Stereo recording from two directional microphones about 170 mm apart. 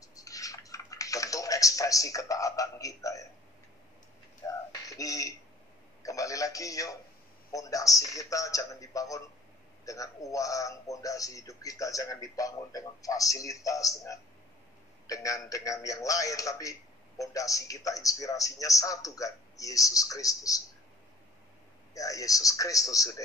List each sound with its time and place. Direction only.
0.0 s typing: 20° left (ahead or behind)
4.4 s a sound: 20° left (ahead or behind)
4.8 s a man's voice: 20° left (ahead or behind)
21.9 s a man's voice: 20° left (ahead or behind)